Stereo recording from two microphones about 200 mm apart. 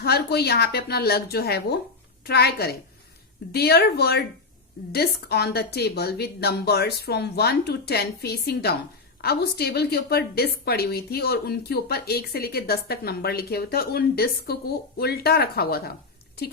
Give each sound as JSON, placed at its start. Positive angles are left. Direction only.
{"t": 0.0, "sound": "a woman's voice", "side_deg": 50}